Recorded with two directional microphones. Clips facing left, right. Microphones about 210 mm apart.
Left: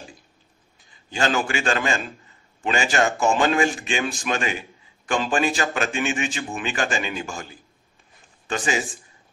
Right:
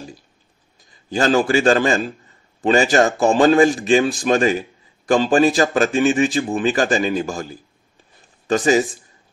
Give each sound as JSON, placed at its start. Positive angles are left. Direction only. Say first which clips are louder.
{"t": 1.1, "sound": "a man's voice", "louder": "right 7 dB", "side_deg": -35}